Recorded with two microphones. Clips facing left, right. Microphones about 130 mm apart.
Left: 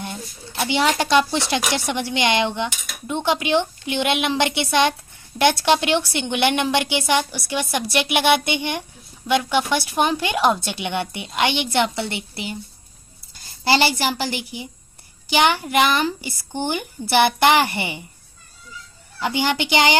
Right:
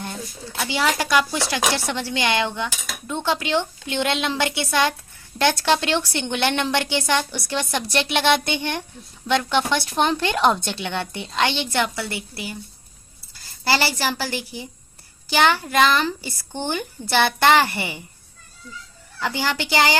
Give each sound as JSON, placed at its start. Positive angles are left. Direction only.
{"t": 0.5, "sound": "speech", "side_deg": 20}
{"t": 10.8, "sound": "speech", "side_deg": 15}
{"t": 13.3, "sound": "speech", "side_deg": 20}
{"t": 19.2, "sound": "speech", "side_deg": 20}